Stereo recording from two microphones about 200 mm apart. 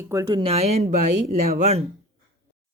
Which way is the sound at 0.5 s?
30° right (ahead or behind).